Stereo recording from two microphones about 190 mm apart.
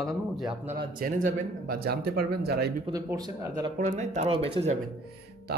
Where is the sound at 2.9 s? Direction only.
20° right (ahead or behind).